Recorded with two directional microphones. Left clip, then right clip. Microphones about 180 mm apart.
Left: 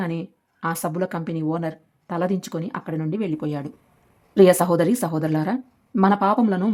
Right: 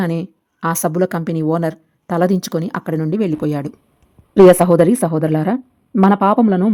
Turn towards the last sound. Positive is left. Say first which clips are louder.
# right 6 dB
turn(degrees=-20)  # may be behind; listen again after turning